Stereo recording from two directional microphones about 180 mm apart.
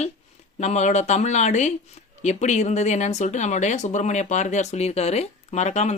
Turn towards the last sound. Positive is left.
turn(degrees=40)  # may be behind; listen again after turning